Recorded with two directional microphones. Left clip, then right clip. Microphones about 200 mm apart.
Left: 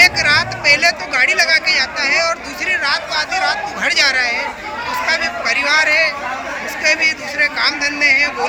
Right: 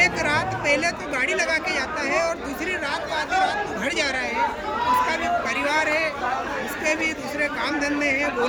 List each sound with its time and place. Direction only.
0.0 s a woman's voice: 20° right (ahead or behind)